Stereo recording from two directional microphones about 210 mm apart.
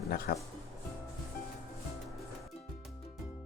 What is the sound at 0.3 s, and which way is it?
Speech, 45° left (ahead or behind).